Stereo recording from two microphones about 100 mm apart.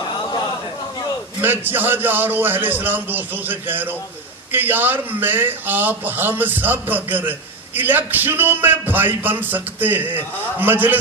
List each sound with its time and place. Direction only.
1.4 s a man's voice: 20° right (ahead or behind)